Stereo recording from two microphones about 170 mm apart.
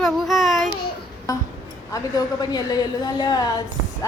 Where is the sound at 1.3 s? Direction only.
20° left (ahead or behind).